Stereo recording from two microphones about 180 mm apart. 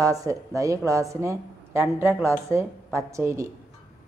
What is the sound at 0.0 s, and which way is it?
A woman's voice, 20° right (ahead or behind).